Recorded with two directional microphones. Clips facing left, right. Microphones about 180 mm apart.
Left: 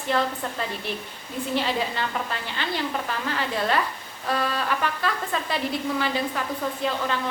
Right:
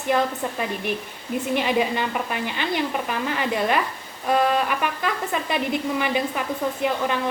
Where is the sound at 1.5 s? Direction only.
15° right (ahead or behind).